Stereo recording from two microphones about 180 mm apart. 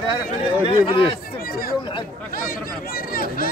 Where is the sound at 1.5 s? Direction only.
55° left (ahead or behind).